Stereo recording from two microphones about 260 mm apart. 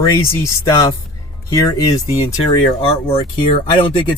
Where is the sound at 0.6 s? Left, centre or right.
Centre.